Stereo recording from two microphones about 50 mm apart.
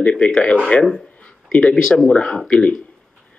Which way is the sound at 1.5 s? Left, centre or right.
Centre.